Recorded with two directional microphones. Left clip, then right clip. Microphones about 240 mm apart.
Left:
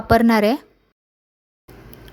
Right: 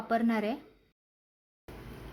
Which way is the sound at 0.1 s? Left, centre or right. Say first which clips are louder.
Left 15 dB; left.